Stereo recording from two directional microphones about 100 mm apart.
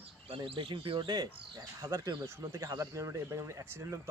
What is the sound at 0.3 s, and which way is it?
Speech, 70° right (ahead or behind).